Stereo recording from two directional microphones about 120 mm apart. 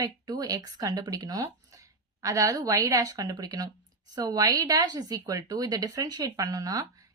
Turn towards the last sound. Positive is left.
turn(degrees=-30)  # may be behind; listen again after turning